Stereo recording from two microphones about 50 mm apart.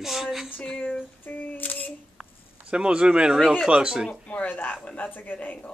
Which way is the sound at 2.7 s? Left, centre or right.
Centre.